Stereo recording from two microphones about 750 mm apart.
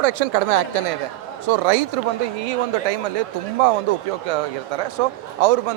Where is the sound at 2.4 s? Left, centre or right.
Right.